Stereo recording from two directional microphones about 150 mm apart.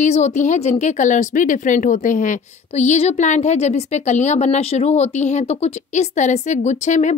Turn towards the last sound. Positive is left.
turn(degrees=55)  # may be behind; listen again after turning